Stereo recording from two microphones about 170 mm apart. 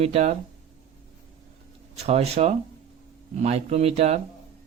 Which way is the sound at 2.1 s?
40° right (ahead or behind).